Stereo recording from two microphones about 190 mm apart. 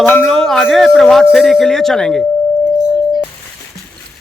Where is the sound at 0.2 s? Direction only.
Centre (ahead or behind).